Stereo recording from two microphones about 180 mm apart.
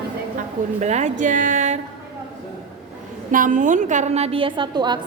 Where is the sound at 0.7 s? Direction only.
40° right (ahead or behind).